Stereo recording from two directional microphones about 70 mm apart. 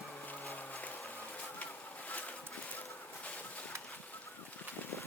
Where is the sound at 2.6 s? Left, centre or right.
Left.